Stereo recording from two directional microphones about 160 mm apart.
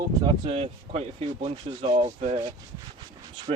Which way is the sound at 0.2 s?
30° right (ahead or behind).